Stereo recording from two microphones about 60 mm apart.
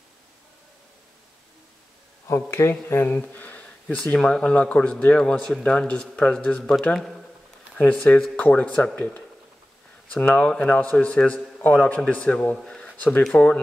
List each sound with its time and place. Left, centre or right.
2.2 s speech: left
3.2 s speech: left; by 7.2 s centre
7.9 s speech: centre
8.4 s a man's voice: left
10.2 s a man's voice: left
12.6 s a sound: centre
13.3 s a man's voice: left